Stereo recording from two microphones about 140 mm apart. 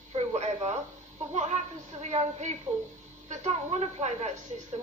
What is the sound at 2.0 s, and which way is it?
Speech, 55° right (ahead or behind).